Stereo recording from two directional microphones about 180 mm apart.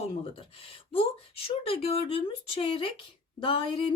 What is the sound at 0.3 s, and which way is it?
Speech, 30° left (ahead or behind).